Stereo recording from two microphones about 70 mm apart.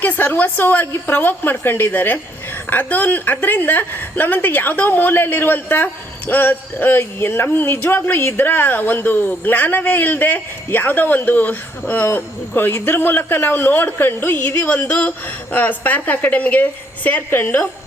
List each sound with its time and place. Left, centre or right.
0.0 s a woman's voice: left